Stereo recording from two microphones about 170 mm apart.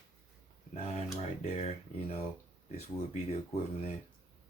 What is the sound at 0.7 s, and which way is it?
Speech, 40° left (ahead or behind).